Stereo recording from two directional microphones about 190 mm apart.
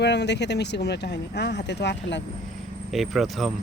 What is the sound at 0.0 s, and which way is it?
Speech, 65° left (ahead or behind).